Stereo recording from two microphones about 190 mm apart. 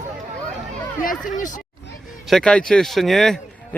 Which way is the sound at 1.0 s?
45° left (ahead or behind).